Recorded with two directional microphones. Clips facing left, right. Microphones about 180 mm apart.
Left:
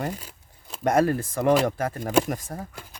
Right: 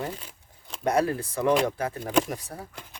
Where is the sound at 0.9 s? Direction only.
50° left (ahead or behind).